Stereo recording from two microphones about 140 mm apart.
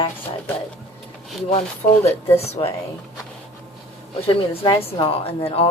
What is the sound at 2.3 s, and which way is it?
Speech, 45° left (ahead or behind).